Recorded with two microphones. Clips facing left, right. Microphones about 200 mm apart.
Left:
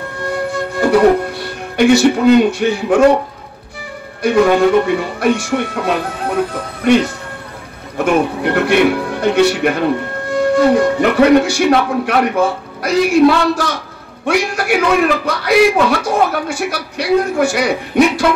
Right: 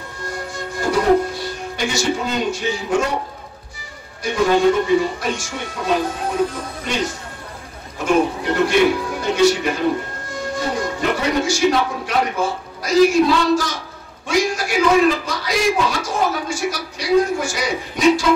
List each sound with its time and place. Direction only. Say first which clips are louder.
0.2 s music: left 9 dB; 60° left (ahead or behind)
4.2 s speech: left 5 dB; 60° left (ahead or behind)